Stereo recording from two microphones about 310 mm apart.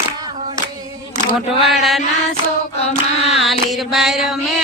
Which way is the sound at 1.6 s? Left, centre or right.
Centre.